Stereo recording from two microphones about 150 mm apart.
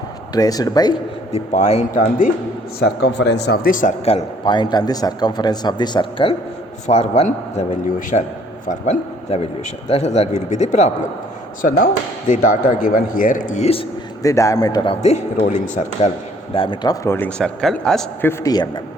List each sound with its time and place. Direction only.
0.3 s a man's voice: 25° left (ahead or behind)
1.3 s speech: 45° left (ahead or behind); by 2.3 s 65° left (ahead or behind)
2.8 s speech: 90° left; by 3.9 s 65° left (ahead or behind)
4.0 s a man's voice: 35° left (ahead or behind)
6.8 s speech: 45° left (ahead or behind)
8.6 s a man's voice: 55° left (ahead or behind)
12.3 s speech: 60° left (ahead or behind); by 13.8 s 45° left (ahead or behind)
14.2 s a man's voice: 20° left (ahead or behind)
15.0 s speech: 45° left (ahead or behind)
16.6 s a man's voice: 30° left (ahead or behind); by 18.0 s 5° left (ahead or behind)
18.2 s a man's voice: 15° left (ahead or behind)